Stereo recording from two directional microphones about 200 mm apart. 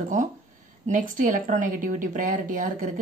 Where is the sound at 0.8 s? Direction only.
40° right (ahead or behind).